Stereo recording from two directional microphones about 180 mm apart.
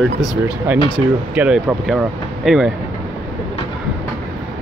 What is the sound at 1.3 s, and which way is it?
Speech, 10° right (ahead or behind).